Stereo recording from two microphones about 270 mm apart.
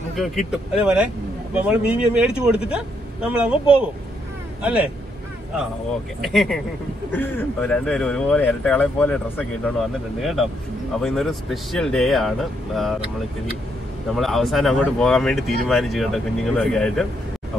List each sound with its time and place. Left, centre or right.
0.5 s speech: centre
6.2 s speech: centre
14.1 s speech: centre